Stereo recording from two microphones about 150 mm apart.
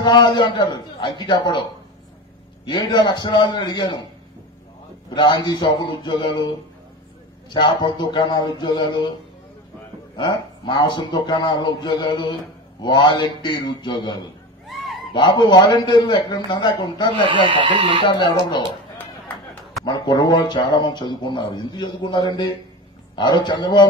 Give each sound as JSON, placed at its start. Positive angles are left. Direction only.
{"t": 0.0, "sound": "a man's voice", "side_deg": 30}
{"t": 5.1, "sound": "a man's voice", "side_deg": 30}
{"t": 10.1, "sound": "a man's voice", "side_deg": 30}
{"t": 14.7, "sound": "a sound", "side_deg": 0}
{"t": 15.1, "sound": "a man's voice", "side_deg": 30}
{"t": 17.5, "sound": "speech", "side_deg": -35}
{"t": 18.0, "sound": "speech", "side_deg": 30}
{"t": 19.8, "sound": "speech", "side_deg": 30}